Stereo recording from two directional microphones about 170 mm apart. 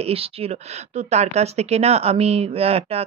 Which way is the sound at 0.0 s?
35° right (ahead or behind).